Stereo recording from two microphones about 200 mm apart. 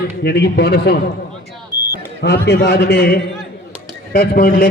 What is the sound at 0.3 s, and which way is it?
Speech, 55° left (ahead or behind).